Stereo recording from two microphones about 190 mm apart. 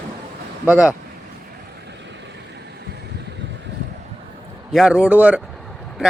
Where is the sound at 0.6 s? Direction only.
10° right (ahead or behind).